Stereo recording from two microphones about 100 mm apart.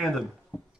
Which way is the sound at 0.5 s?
10° left (ahead or behind).